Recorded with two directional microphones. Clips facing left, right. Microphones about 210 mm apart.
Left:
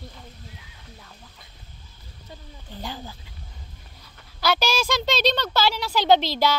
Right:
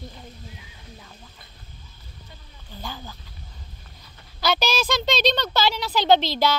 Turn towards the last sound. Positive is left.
turn(degrees=10)  # may be behind; listen again after turning